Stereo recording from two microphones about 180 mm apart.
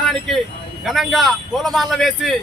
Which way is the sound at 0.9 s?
Centre (ahead or behind).